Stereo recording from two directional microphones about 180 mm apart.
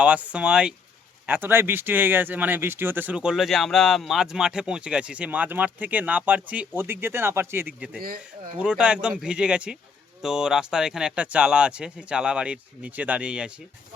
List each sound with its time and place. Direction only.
0.0 s speech: 5° right (ahead or behind)
7.9 s speech: 55° right (ahead or behind)
8.5 s speech: 5° right (ahead or behind)